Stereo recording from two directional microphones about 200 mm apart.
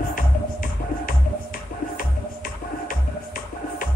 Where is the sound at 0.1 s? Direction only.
45° left (ahead or behind).